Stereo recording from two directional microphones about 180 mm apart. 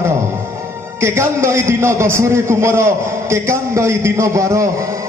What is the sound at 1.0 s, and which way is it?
A man's voice, 15° right (ahead or behind).